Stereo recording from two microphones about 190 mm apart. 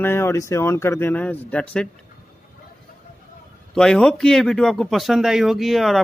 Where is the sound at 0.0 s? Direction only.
15° left (ahead or behind).